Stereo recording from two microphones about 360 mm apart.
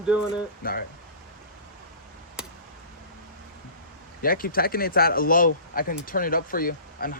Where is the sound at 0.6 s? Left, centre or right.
Left.